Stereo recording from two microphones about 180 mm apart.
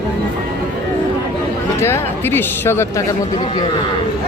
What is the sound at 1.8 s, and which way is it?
Speech, 15° left (ahead or behind).